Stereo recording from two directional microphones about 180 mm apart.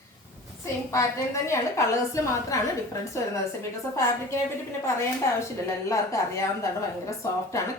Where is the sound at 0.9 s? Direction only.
15° left (ahead or behind).